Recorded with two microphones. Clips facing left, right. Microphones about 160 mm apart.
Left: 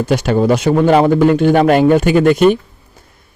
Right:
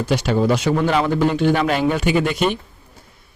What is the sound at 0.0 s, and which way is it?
Speech, 50° left (ahead or behind).